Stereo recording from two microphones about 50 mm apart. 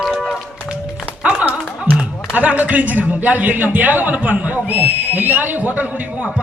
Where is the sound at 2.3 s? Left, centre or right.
Right.